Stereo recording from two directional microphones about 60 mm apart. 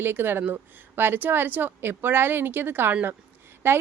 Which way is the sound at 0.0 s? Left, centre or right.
Right.